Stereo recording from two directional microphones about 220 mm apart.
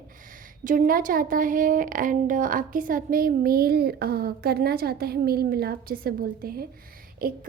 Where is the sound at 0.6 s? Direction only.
40° right (ahead or behind).